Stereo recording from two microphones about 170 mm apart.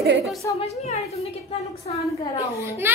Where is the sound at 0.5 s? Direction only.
40° left (ahead or behind).